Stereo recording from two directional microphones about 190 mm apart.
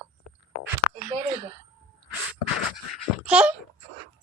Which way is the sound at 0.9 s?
35° right (ahead or behind).